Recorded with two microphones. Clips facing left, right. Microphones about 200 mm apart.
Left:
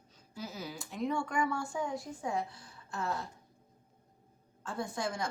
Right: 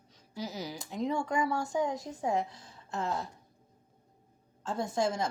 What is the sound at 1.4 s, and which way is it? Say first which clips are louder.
Speech: right 2 dB; 40° right (ahead or behind).